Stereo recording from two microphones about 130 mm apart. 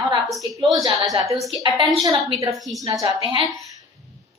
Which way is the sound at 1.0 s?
25° right (ahead or behind).